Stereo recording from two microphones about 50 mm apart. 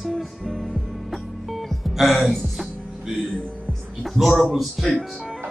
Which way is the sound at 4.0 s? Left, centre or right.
Centre.